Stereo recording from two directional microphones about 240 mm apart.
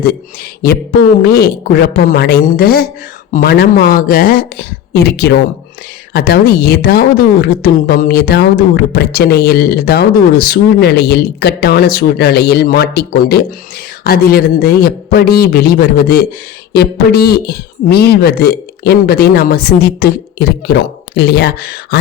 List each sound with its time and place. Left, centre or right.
0.6 s a woman's voice: left